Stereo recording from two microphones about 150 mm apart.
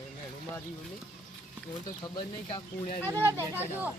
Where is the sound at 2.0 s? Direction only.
30° left (ahead or behind).